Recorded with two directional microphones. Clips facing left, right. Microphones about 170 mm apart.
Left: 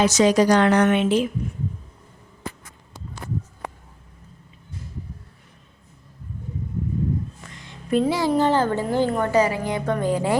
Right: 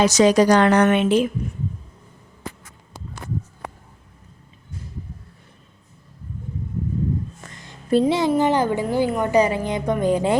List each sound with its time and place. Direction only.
0.0 s a woman's voice: 40° right (ahead or behind)
0.3 s a woman's voice: 65° right (ahead or behind)
7.4 s a sound: 45° right (ahead or behind)
8.0 s a child's voice: 20° right (ahead or behind)